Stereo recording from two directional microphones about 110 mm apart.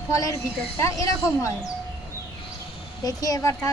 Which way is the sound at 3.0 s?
35° left (ahead or behind).